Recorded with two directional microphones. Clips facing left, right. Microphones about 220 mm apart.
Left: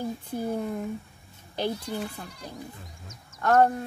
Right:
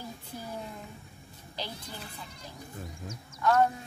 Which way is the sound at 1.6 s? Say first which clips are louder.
Left 11 dB; 60° left (ahead or behind).